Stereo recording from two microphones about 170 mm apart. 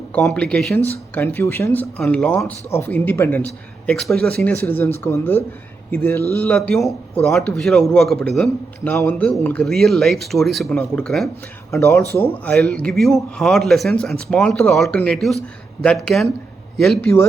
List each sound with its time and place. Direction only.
0.1 s speech: 5° left (ahead or behind)
11.7 s speech: 15° left (ahead or behind); by 17.1 s centre (ahead or behind)